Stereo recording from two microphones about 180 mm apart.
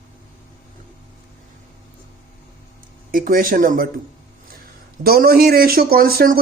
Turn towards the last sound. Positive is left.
turn(degrees=-55)  # may be behind; listen again after turning